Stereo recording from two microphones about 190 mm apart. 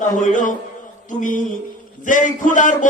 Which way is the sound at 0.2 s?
40° left (ahead or behind).